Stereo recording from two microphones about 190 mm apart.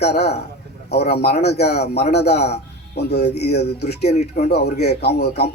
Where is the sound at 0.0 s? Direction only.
60° left (ahead or behind).